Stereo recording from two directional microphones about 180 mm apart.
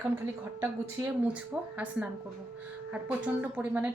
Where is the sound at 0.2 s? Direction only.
10° right (ahead or behind).